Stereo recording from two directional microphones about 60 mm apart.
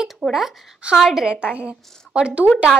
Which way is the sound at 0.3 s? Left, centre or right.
Centre.